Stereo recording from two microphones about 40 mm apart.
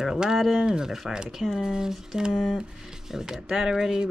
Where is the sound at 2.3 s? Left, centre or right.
Centre.